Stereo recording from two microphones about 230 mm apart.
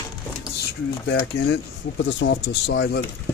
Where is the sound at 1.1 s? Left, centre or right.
Left.